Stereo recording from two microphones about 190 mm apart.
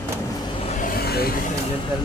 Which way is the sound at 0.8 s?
55° left (ahead or behind).